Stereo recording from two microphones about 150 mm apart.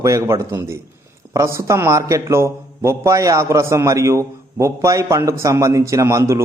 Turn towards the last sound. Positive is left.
turn(degrees=-20)  # may be behind; listen again after turning